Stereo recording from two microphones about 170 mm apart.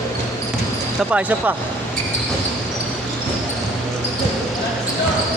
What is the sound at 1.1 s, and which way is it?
Speech, 10° right (ahead or behind).